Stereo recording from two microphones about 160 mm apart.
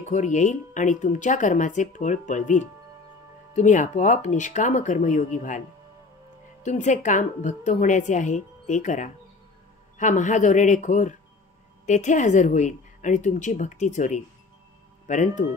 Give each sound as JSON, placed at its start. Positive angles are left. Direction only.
{"t": 0.1, "sound": "speech", "side_deg": 50}
{"t": 6.6, "sound": "speech", "side_deg": 50}